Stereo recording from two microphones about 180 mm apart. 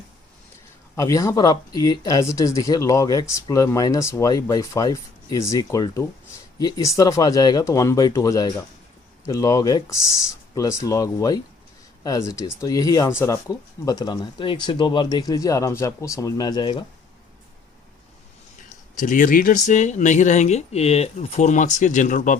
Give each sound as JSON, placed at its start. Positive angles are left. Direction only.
{"t": 0.9, "sound": "speech", "side_deg": 15}
{"t": 18.9, "sound": "speech", "side_deg": 45}